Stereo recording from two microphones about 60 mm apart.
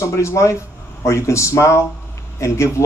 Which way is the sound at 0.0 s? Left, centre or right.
Left.